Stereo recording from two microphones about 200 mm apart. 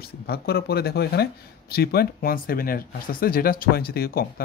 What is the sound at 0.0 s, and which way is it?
Speech, 50° left (ahead or behind).